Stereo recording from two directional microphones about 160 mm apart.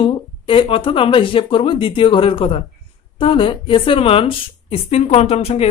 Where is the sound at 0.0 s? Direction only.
35° left (ahead or behind).